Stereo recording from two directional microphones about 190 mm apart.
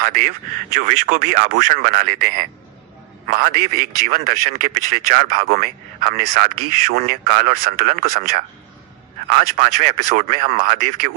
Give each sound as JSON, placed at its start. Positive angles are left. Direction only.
{"t": 0.0, "sound": "a man's voice", "side_deg": -50}